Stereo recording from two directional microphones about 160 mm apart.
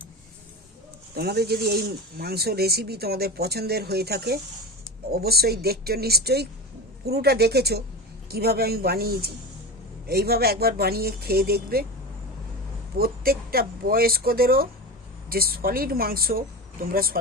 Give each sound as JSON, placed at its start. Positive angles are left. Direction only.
{"t": 1.1, "sound": "speech", "side_deg": -85}
{"t": 13.0, "sound": "speech", "side_deg": -70}